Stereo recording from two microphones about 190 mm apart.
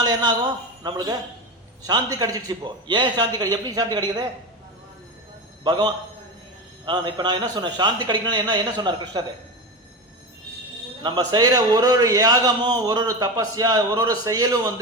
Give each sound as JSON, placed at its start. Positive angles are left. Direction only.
{"t": 0.0, "sound": "a man's voice", "side_deg": -20}
{"t": 5.6, "sound": "a man's voice", "side_deg": -20}
{"t": 11.0, "sound": "a man's voice", "side_deg": -25}